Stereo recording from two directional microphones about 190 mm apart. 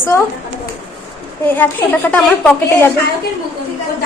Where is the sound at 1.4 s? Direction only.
10° left (ahead or behind).